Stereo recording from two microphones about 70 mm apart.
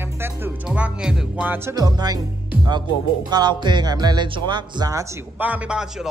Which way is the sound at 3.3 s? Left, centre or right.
Right.